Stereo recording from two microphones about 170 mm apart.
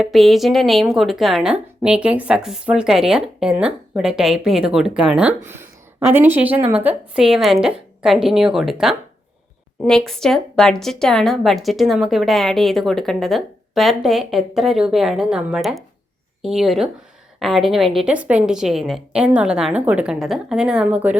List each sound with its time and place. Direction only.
0.0 s a woman's voice: centre (ahead or behind)